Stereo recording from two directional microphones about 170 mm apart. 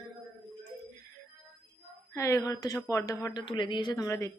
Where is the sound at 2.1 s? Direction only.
20° left (ahead or behind).